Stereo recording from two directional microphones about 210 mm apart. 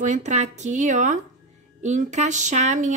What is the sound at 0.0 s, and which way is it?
Speech, 35° right (ahead or behind).